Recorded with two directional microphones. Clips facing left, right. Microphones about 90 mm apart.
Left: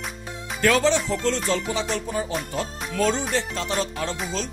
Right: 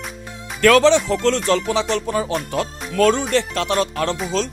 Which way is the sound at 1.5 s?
85° right.